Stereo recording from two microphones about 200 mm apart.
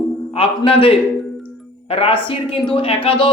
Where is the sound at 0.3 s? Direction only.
25° left (ahead or behind).